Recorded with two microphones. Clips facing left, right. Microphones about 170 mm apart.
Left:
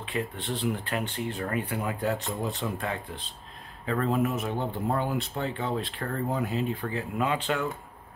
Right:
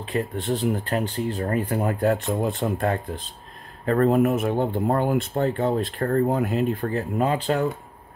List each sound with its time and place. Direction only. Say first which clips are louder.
0.0 s speech: right 6 dB; 40° right (ahead or behind)